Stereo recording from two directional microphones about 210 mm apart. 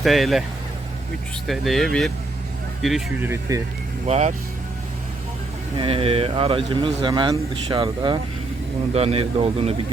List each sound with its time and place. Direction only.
0.0 s speech: centre (ahead or behind)
1.5 s speech: centre (ahead or behind)
3.5 s speech: 15° right (ahead or behind)
4.0 s speech: 30° right (ahead or behind)
5.7 s speech: 25° right (ahead or behind)